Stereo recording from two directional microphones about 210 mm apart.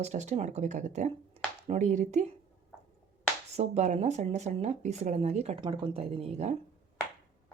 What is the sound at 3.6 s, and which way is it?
Speech, 35° right (ahead or behind).